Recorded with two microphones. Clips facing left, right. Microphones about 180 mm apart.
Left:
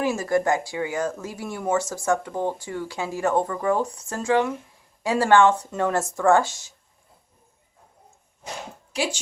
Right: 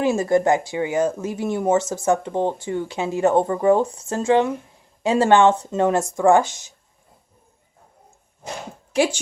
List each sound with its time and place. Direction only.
0.0 s speech: 25° right (ahead or behind)